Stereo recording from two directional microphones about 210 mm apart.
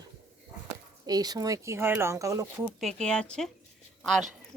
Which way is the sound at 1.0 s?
20° right (ahead or behind).